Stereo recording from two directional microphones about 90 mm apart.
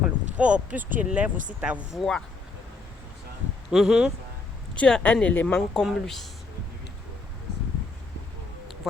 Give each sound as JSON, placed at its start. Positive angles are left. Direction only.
{"t": 0.3, "sound": "speech", "side_deg": -15}
{"t": 2.0, "sound": "speech", "side_deg": 5}
{"t": 3.7, "sound": "speech", "side_deg": -5}
{"t": 4.7, "sound": "speech", "side_deg": 10}
{"t": 5.5, "sound": "speech", "side_deg": 5}